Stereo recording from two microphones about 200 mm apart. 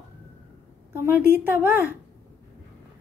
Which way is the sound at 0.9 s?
10° right (ahead or behind).